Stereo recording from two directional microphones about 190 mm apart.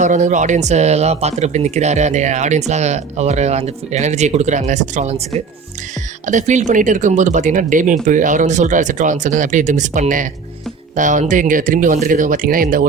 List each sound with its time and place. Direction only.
0.0 s speech: 40° right (ahead or behind)